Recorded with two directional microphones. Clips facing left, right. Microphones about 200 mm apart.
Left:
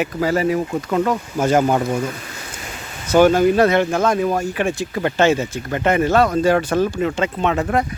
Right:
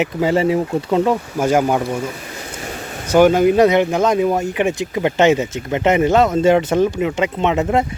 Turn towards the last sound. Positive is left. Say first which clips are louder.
# right 2 dB
turn(degrees=-20)  # may be behind; listen again after turning